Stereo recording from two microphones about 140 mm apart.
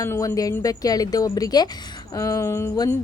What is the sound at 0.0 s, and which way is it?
A woman's voice, 20° left (ahead or behind).